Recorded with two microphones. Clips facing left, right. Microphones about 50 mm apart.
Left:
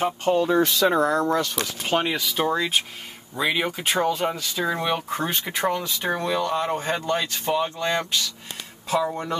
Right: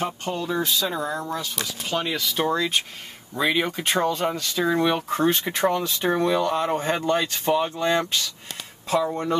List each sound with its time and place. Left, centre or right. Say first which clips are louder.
0.0 s speech: left 6 dB; left
0.6 s speech: left 6 dB; left
2.1 s speech: even; centre
8.8 s speech: right 1 dB; centre